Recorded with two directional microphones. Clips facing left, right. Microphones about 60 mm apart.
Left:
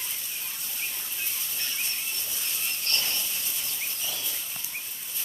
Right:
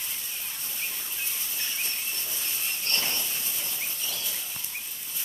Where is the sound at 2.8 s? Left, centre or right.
Right.